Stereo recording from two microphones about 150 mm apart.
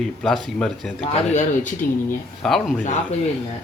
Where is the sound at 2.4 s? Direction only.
Centre (ahead or behind).